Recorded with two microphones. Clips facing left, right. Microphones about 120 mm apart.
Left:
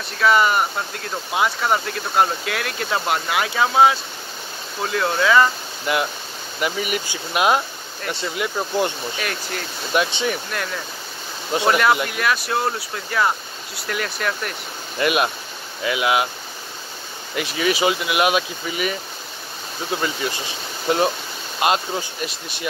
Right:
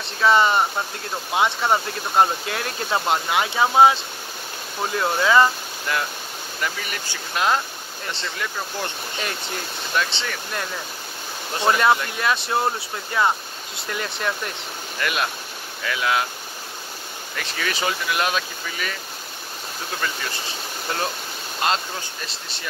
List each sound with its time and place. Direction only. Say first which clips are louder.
0.0 s speech: even; 25° right (ahead or behind)
4.9 s speech: left 1 dB; 20° right (ahead or behind)
5.9 s speech: left 4 dB; 15° left (ahead or behind)
9.9 s speech: left 5 dB; 15° left (ahead or behind)
11.6 s speech: even; 25° right (ahead or behind)
15.0 s speech: left 6 dB; 20° left (ahead or behind)
17.4 s speech: left 7 dB; 10° left (ahead or behind)
20.9 s speech: left 8 dB; 20° left (ahead or behind)